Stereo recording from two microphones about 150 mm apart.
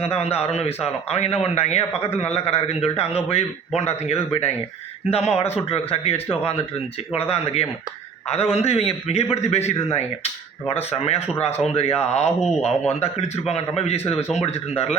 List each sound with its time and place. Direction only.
0.0 s a man's voice: 40° left (ahead or behind)
12.4 s speech: centre (ahead or behind)
12.9 s a man's voice: 45° left (ahead or behind)